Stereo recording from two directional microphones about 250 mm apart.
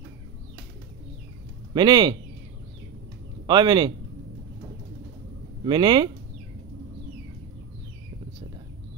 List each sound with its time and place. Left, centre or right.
1.7 s speech: centre
3.4 s speech: centre
5.7 s speech: centre